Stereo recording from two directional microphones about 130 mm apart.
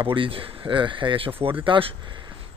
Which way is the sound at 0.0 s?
40° right (ahead or behind).